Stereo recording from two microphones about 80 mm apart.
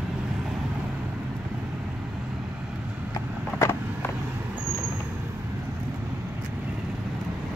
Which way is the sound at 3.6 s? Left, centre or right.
Left.